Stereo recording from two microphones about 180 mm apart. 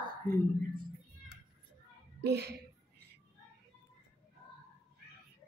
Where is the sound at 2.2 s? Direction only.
70° right (ahead or behind).